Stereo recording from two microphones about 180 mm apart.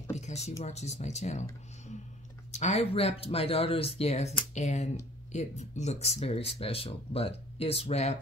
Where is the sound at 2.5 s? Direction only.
40° left (ahead or behind).